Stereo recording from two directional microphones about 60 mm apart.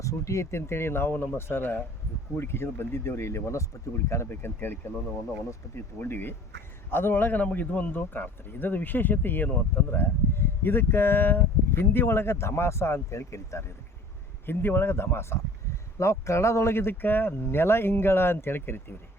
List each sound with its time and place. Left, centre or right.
0.0 s speech: left
5.6 s speech: left
6.0 s speech: left
14.4 s speech: left
16.0 s speech: left